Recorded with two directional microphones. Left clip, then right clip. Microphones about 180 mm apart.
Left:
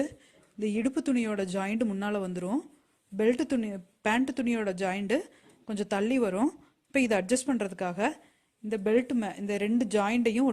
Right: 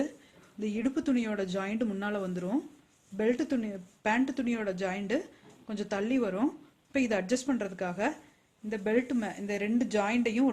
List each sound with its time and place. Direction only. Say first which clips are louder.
0.6 s speech: left 2 dB; 40° left (ahead or behind)